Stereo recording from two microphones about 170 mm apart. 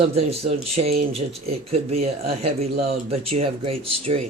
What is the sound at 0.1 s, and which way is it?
Speech, 35° right (ahead or behind).